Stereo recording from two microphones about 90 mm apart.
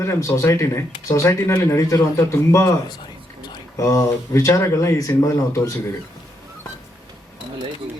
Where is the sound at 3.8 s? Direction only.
35° left (ahead or behind).